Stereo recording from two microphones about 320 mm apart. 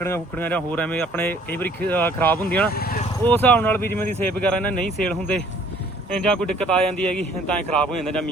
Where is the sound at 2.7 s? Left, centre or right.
Left.